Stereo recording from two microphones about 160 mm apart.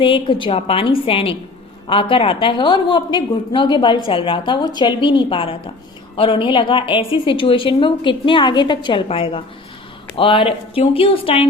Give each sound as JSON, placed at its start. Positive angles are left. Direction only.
{"t": 0.0, "sound": "a woman's voice", "side_deg": 35}